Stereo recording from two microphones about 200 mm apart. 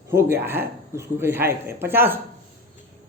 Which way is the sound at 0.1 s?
15° right (ahead or behind).